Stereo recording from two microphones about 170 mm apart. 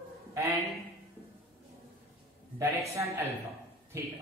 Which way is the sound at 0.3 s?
20° right (ahead or behind).